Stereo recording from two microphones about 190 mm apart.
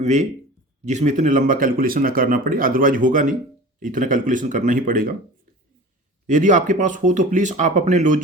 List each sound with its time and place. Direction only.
0.0 s speech: 40° right (ahead or behind)
6.2 s speech: 40° right (ahead or behind)